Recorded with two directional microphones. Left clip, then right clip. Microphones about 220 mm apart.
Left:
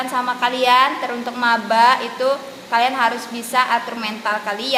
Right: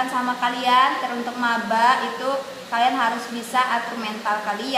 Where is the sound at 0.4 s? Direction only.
45° left (ahead or behind).